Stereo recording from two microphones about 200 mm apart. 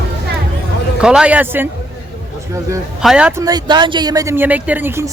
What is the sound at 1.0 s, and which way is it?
Speech, 5° right (ahead or behind).